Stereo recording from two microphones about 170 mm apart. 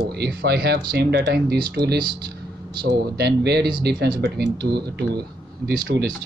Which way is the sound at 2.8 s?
75° right (ahead or behind).